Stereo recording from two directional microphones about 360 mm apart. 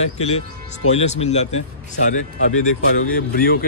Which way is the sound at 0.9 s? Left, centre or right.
Centre.